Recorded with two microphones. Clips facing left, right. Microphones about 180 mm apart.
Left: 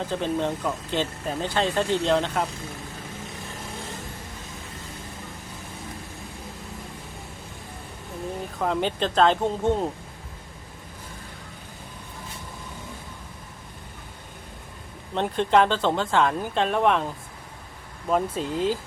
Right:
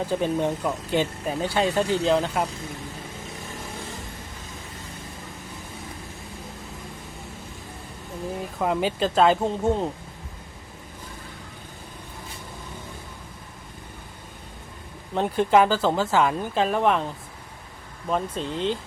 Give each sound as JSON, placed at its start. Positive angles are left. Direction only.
{"t": 0.1, "sound": "speech", "side_deg": -10}
{"t": 8.5, "sound": "speech", "side_deg": -5}
{"t": 15.1, "sound": "speech", "side_deg": -5}
{"t": 18.1, "sound": "speech", "side_deg": 5}